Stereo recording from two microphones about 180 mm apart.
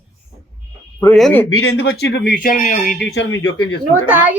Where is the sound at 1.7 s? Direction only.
70° left (ahead or behind); by 3.0 s 50° left (ahead or behind).